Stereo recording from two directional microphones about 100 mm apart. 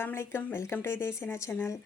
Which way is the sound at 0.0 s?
25° left (ahead or behind).